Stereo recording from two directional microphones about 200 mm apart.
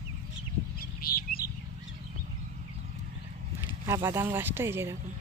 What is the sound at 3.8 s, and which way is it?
Speech, 15° right (ahead or behind).